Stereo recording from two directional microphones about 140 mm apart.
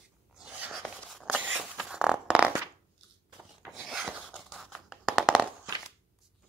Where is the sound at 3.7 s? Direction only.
Centre (ahead or behind).